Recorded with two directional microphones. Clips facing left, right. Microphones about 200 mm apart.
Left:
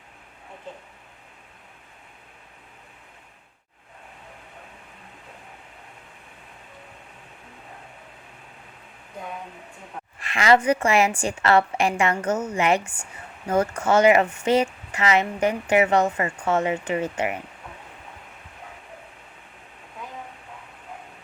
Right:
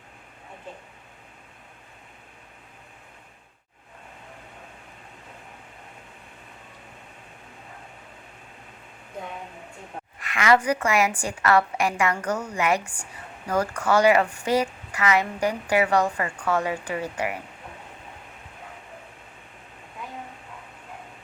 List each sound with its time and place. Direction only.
10.2 s speech: 25° left (ahead or behind)